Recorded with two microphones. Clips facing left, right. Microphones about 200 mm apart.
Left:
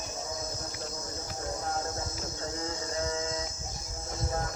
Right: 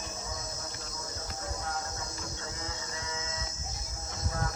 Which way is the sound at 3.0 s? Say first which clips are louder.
Left 11 dB; 40° left (ahead or behind).